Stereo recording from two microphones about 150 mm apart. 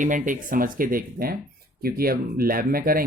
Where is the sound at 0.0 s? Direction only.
60° right (ahead or behind).